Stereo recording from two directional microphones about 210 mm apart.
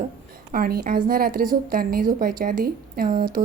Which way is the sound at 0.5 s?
45° right (ahead or behind).